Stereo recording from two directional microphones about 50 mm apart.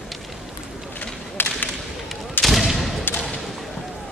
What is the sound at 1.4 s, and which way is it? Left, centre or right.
Whip, left.